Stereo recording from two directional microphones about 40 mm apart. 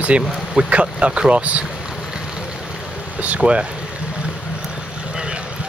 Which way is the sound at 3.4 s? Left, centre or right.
Right.